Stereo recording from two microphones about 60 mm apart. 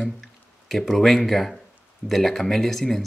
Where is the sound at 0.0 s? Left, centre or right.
Centre.